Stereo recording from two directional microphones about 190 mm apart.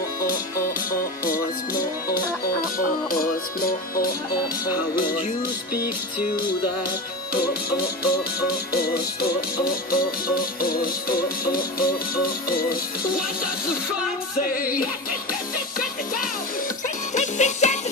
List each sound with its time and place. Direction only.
1.2 s music: 45° left (ahead or behind)
8.7 s music: 55° left (ahead or behind)
14.4 s music: 50° left (ahead or behind)
17.1 s music: 40° left (ahead or behind)